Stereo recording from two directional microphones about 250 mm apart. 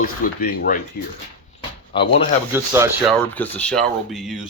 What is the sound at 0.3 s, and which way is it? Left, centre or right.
Speech, left.